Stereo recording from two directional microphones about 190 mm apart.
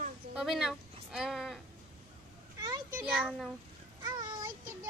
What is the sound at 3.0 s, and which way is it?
Speech, 5° right (ahead or behind).